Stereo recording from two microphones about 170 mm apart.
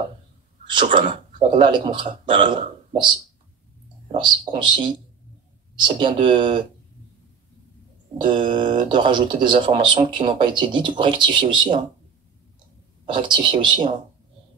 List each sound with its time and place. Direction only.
0.7 s speech: 30° right (ahead or behind)
4.1 s speech: 30° right (ahead or behind)
8.2 s speech: 30° right (ahead or behind)
13.0 s speech: 30° right (ahead or behind)